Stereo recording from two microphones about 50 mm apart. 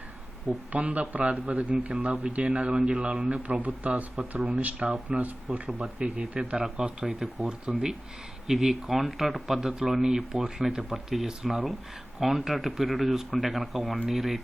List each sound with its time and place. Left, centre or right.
0.7 s speech: right; by 14.4 s centre